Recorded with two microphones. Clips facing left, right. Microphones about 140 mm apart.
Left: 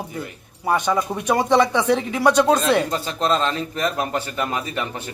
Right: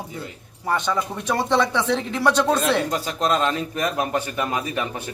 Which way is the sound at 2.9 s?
10° right (ahead or behind).